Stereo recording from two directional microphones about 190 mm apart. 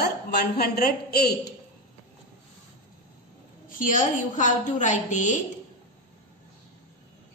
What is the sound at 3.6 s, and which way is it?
A woman's voice, 45° left (ahead or behind).